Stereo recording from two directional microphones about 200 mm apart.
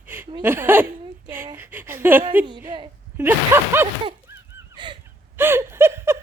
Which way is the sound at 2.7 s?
25° right (ahead or behind).